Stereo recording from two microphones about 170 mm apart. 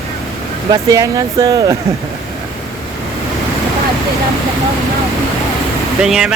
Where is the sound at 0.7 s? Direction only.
20° right (ahead or behind).